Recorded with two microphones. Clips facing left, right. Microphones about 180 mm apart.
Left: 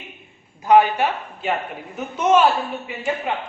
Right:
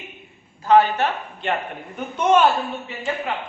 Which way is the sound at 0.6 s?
15° left (ahead or behind).